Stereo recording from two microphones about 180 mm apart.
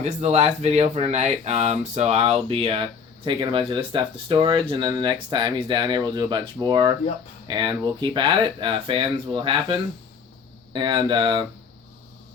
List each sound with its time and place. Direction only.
0.0 s speech: 35° right (ahead or behind)